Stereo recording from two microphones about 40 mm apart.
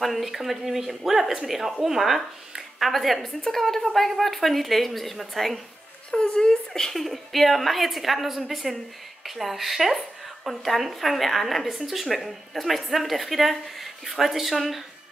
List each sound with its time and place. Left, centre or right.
0.0 s speech: centre
6.1 s speech: centre
7.0 s speech: centre